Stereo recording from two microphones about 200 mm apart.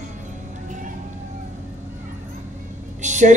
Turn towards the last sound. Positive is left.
turn(degrees=-35)  # may be behind; listen again after turning